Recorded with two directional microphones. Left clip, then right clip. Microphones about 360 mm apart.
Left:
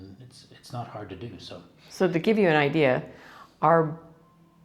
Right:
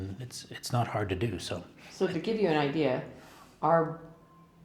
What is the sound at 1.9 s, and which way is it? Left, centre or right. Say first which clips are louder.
Speech: left 7 dB; left.